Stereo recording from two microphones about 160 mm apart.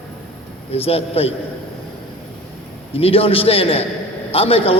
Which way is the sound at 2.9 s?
35° left (ahead or behind).